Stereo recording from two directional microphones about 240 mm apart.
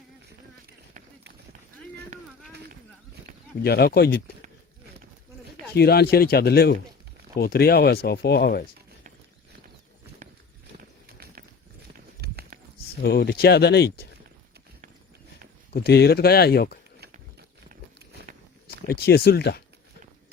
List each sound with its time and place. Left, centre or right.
3.6 s speech: left
5.7 s speech: left
11.9 s clip-clop: right
13.0 s speech: left
15.7 s speech: left
18.1 s walk: right
18.9 s speech: left